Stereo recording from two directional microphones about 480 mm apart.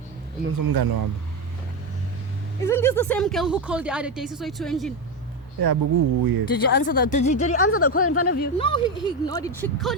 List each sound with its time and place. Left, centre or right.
0.6 s speech: right
2.6 s speech: centre
5.5 s speech: right
6.7 s speech: centre
7.6 s speech: left; by 9.9 s centre